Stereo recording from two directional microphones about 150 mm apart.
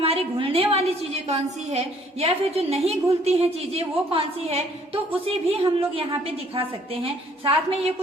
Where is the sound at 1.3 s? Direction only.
45° right (ahead or behind).